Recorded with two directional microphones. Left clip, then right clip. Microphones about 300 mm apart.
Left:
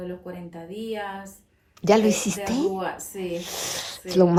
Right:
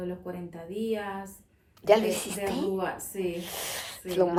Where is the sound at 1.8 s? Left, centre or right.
Left.